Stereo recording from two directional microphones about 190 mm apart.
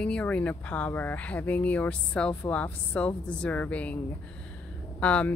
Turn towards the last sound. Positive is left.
turn(degrees=5)  # may be behind; listen again after turning